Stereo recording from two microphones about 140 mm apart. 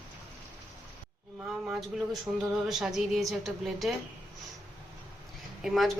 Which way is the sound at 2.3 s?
15° right (ahead or behind).